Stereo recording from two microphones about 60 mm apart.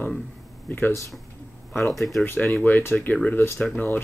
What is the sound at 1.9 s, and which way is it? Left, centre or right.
Speech, centre.